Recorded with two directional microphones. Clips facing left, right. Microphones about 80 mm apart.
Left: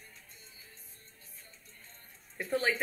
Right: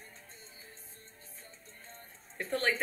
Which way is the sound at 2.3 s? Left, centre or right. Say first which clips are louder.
Left 2 dB; centre.